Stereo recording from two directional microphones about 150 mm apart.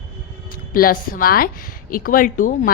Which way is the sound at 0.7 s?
70° left (ahead or behind).